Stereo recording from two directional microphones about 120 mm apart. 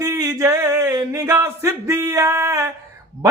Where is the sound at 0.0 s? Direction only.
25° right (ahead or behind).